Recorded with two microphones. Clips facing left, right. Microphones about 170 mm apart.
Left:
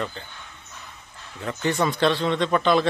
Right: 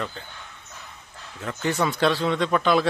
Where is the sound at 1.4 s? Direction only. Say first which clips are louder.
Left 1 dB; centre (ahead or behind).